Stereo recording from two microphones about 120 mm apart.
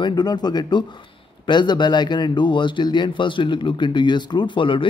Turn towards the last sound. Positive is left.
turn(degrees=45)  # may be behind; listen again after turning